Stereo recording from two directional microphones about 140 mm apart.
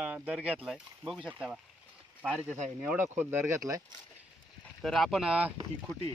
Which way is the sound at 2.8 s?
15° right (ahead or behind).